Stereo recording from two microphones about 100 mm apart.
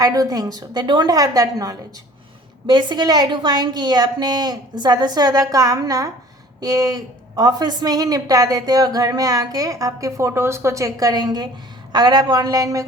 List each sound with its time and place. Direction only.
0.0 s a woman's voice: 35° right (ahead or behind)